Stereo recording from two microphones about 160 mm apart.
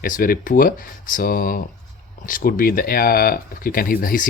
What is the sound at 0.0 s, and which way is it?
Speech, 60° left (ahead or behind).